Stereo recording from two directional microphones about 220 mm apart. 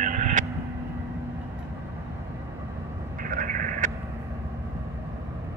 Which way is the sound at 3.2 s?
35° right (ahead or behind).